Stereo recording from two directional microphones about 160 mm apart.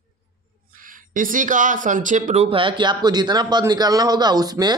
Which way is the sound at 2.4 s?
35° right (ahead or behind).